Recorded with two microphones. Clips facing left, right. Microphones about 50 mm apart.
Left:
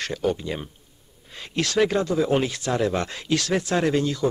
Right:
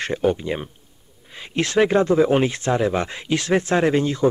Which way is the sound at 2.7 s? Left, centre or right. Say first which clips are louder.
Right 3 dB; centre.